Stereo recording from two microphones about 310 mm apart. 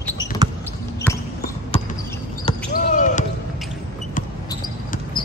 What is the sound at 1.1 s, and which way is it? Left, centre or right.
Basketball bounce, centre.